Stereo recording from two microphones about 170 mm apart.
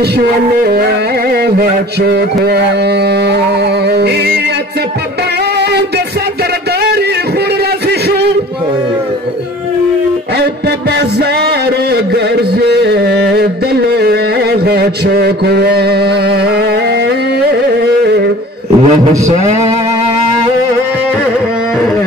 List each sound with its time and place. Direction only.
0.7 s music: 65° right (ahead or behind)
5.6 s music: 75° right (ahead or behind)
11.0 s music: 70° right (ahead or behind)
13.9 s mantra: 70° right (ahead or behind)
18.9 s a sound: 45° right (ahead or behind)